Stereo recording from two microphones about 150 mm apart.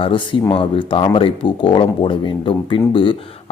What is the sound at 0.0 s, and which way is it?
Speech, 35° left (ahead or behind).